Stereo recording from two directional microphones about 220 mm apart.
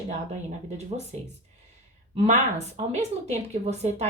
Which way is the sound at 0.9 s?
30° right (ahead or behind).